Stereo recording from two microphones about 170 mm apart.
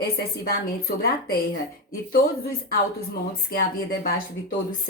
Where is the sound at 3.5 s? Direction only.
60° left (ahead or behind).